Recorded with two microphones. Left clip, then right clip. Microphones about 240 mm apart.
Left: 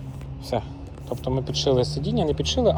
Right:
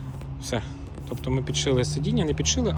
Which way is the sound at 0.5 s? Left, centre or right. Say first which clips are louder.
Left 4 dB; centre.